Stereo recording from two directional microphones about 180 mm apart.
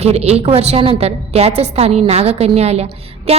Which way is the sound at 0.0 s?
35° right (ahead or behind).